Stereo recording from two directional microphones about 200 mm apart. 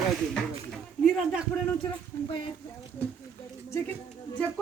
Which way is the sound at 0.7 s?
5° right (ahead or behind).